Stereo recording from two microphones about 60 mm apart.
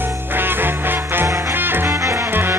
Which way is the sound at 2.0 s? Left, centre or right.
Right.